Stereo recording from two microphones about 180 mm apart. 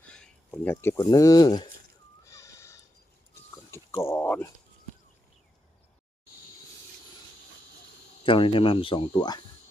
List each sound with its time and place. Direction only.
0.0 s speech: 5° left (ahead or behind); by 1.6 s 20° left (ahead or behind)
2.2 s a sound: 15° left (ahead or behind)
8.2 s speech: 30° left (ahead or behind)